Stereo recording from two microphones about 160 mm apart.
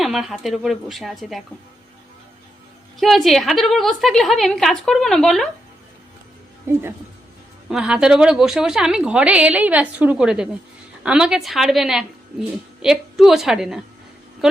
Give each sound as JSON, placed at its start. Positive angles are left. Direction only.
{"t": 0.0, "sound": "a woman's voice", "side_deg": 0}
{"t": 3.0, "sound": "a woman's voice", "side_deg": 0}
{"t": 6.7, "sound": "speech", "side_deg": -15}
{"t": 7.7, "sound": "a woman's voice", "side_deg": -5}